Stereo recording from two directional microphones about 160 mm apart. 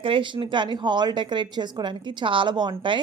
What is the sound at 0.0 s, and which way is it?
A woman's voice, 30° right (ahead or behind).